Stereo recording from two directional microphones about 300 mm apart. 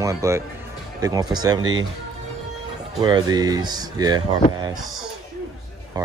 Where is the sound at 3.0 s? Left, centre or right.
Centre.